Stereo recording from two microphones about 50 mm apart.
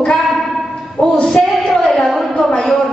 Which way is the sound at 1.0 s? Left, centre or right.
Centre.